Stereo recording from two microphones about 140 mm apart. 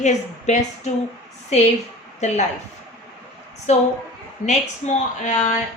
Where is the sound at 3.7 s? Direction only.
50° left (ahead or behind).